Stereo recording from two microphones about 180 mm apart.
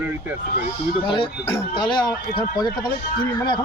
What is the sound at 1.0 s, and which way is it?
Speech, 30° left (ahead or behind).